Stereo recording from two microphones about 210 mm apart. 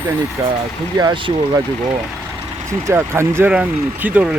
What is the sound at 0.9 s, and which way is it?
Speech, 20° right (ahead or behind).